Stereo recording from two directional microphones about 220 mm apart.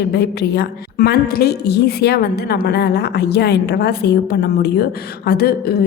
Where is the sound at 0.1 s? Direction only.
50° left (ahead or behind).